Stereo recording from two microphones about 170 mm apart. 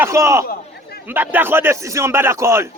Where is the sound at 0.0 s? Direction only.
15° right (ahead or behind).